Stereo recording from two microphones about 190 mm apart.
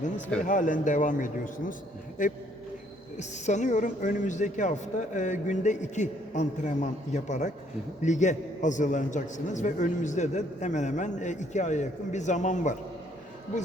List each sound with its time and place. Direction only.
0.4 s a man's voice: 45° left (ahead or behind)